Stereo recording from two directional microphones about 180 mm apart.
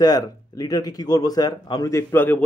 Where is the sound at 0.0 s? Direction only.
20° left (ahead or behind).